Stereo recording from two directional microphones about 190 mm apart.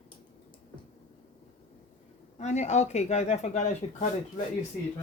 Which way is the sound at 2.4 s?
35° left (ahead or behind).